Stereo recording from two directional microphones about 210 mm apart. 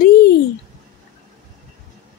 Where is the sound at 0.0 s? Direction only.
45° left (ahead or behind).